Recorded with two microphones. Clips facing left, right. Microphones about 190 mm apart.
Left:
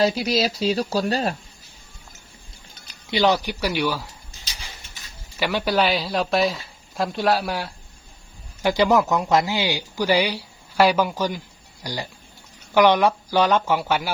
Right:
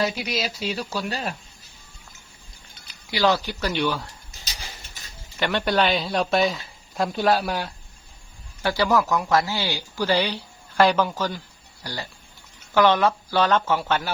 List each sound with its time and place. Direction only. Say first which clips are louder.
0.0 s speech: left 5 dB; 35° left (ahead or behind)
3.1 s speech: left 2 dB; 20° left (ahead or behind)
5.4 s speech: left 1 dB; 5° left (ahead or behind)
8.6 s speech: left 3 dB; 20° left (ahead or behind)